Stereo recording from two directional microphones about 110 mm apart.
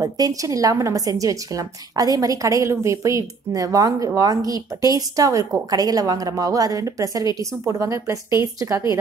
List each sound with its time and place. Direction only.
0.0 s a woman's voice: 35° right (ahead or behind)